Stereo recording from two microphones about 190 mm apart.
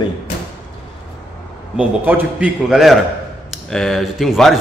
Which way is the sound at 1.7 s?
10° right (ahead or behind).